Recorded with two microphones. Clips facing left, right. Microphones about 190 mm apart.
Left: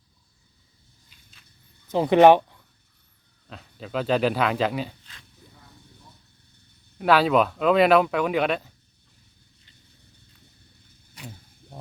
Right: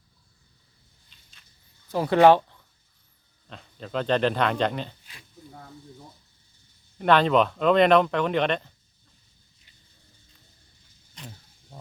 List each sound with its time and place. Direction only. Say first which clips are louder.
1.9 s speech: left 2 dB; 20° left (ahead or behind)
3.5 s speech: left 1 dB; 5° left (ahead or behind)
7.0 s speech: even; 5° left (ahead or behind)
11.1 s vehicle: left 2 dB; 10° left (ahead or behind)